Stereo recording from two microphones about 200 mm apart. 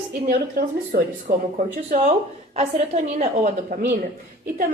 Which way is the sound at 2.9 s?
30° right (ahead or behind).